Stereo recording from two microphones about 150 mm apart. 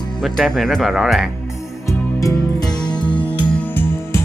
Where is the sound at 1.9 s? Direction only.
20° left (ahead or behind).